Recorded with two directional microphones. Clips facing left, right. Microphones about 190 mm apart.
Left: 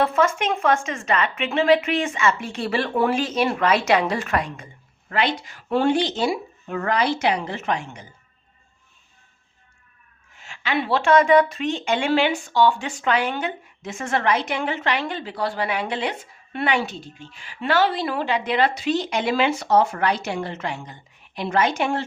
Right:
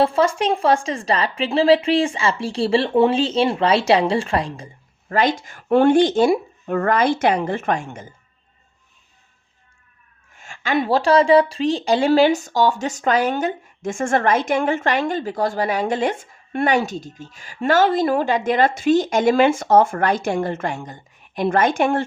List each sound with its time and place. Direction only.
0.0 s speech: 30° right (ahead or behind); by 8.1 s 50° right (ahead or behind)
10.3 s a woman's voice: 50° right (ahead or behind)